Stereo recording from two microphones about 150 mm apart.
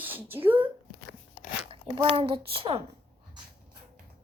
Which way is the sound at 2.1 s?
40° right (ahead or behind).